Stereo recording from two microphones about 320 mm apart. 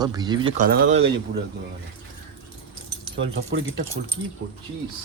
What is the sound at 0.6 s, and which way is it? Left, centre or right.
Speech, right.